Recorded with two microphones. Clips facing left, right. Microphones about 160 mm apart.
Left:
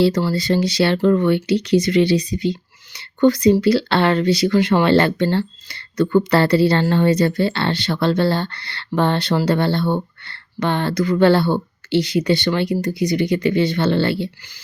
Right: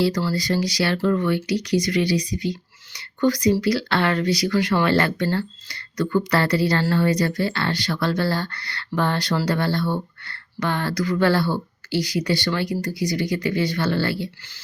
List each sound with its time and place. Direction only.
0.0 s speech: 20° left (ahead or behind)